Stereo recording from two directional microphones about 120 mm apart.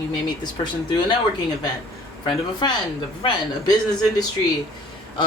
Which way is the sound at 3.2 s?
35° left (ahead or behind).